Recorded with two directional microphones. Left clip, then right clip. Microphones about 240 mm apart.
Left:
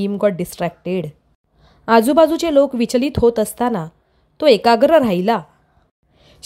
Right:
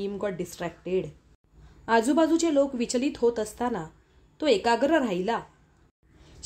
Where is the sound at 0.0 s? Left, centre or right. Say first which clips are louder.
Left 12 dB; left.